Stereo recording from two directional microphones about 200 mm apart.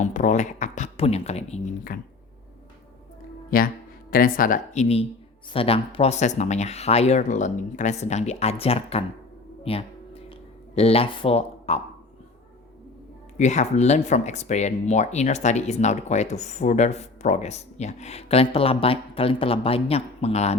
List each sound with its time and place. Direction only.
0.0 s speech: 40° left (ahead or behind)
3.5 s speech: 45° left (ahead or behind); by 11.8 s 30° left (ahead or behind)
13.3 s speech: 35° left (ahead or behind)